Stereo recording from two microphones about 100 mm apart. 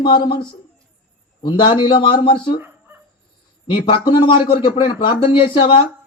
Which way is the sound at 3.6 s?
55° left (ahead or behind).